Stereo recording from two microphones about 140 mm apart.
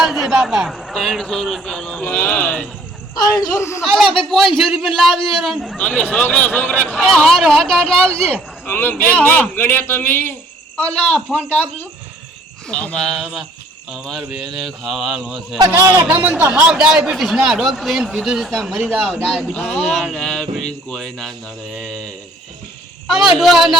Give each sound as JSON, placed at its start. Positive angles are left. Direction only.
{"t": 0.0, "sound": "speech", "side_deg": 0}
{"t": 3.2, "sound": "speech", "side_deg": 25}
{"t": 3.8, "sound": "a man's voice", "side_deg": 0}
{"t": 15.5, "sound": "speech", "side_deg": -25}
{"t": 16.0, "sound": "a man's voice", "side_deg": -10}
{"t": 21.8, "sound": "speech", "side_deg": 55}
{"t": 23.0, "sound": "speech", "side_deg": 0}